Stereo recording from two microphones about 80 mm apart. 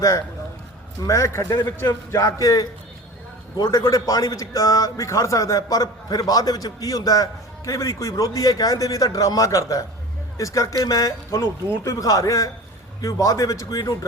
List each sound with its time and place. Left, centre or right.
1.0 s a man's voice: left